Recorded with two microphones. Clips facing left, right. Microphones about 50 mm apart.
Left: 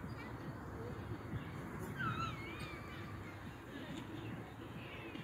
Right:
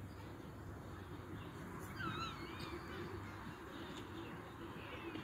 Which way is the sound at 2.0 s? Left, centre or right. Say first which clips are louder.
Left 4 dB; left.